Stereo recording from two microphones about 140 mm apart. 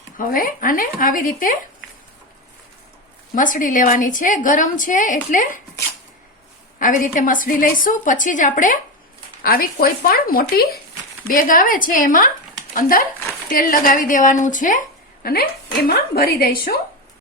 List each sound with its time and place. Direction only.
0.2 s speech: 90° left
3.3 s a woman's voice: 70° left (ahead or behind)
6.7 s a woman's voice: 70° left (ahead or behind)
9.4 s a woman's voice: 90° left
11.3 s a woman's voice: 80° left
12.7 s a woman's voice: 90° left; by 14.8 s 70° left (ahead or behind)
15.2 s a woman's voice: 90° left